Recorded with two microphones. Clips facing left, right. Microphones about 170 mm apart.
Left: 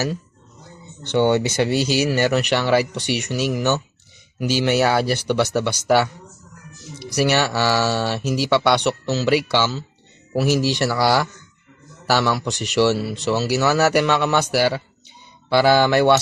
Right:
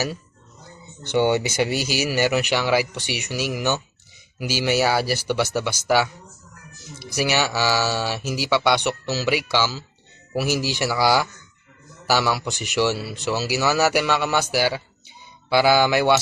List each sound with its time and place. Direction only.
1.0 s speech: 10° right (ahead or behind)